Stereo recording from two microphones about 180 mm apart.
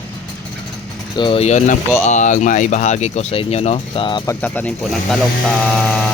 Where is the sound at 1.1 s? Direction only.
30° left (ahead or behind).